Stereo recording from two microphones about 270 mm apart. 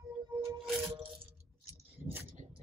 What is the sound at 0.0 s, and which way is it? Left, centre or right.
Music, centre.